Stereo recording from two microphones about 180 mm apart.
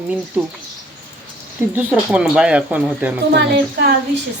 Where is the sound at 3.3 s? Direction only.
65° right (ahead or behind).